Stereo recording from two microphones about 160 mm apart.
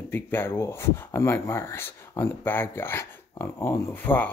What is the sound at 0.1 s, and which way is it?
Speech, 15° left (ahead or behind).